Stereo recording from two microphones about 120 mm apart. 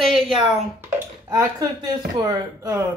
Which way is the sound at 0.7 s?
20° right (ahead or behind).